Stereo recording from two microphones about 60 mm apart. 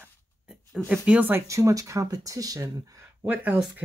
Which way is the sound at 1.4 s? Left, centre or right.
Right.